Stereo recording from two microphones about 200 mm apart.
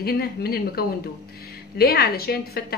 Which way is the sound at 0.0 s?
50° left (ahead or behind).